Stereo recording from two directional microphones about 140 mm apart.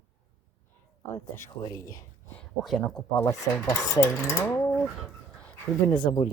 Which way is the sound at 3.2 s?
20° left (ahead or behind).